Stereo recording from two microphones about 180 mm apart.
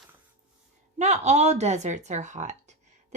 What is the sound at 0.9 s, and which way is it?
Speech, 40° right (ahead or behind).